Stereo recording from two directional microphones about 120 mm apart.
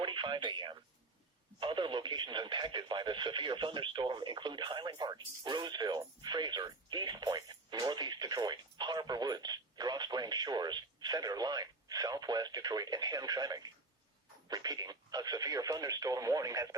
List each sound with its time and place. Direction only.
0.0 s speech: 40° right (ahead or behind)